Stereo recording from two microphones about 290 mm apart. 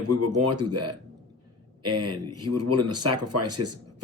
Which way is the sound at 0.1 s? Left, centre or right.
Right.